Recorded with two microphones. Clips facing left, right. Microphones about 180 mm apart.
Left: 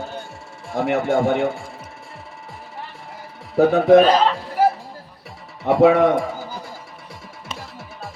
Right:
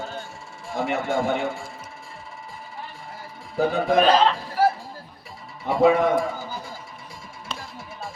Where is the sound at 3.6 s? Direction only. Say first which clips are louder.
Left 8 dB; 65° left (ahead or behind).